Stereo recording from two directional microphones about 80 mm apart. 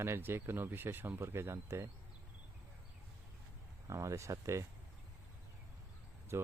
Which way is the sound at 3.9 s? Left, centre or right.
Right.